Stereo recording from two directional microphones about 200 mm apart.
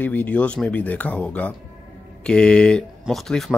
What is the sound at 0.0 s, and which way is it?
Speech, 10° left (ahead or behind).